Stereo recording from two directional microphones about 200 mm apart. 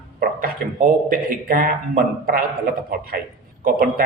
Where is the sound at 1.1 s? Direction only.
45° right (ahead or behind).